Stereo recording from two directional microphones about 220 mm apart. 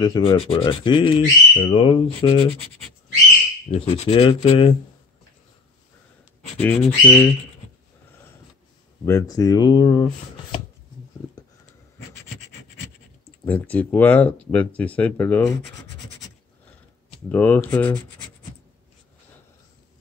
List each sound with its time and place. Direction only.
0.0 s speech: 20° left (ahead or behind)
3.8 s speech: 30° left (ahead or behind)
6.6 s speech: 5° left (ahead or behind)
9.0 s speech: 15° left (ahead or behind)
13.5 s speech: 5° left (ahead or behind)
17.3 s speech: 10° left (ahead or behind)